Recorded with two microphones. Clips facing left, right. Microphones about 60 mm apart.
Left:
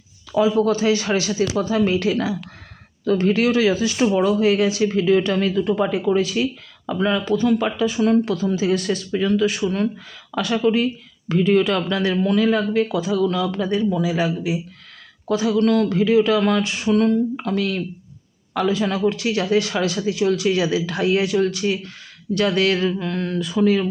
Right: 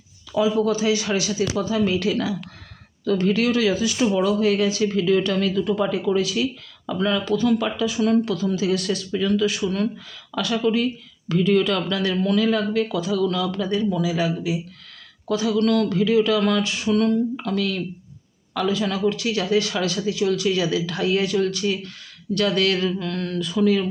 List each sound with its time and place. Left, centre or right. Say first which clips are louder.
0.3 s speech: left 2 dB; left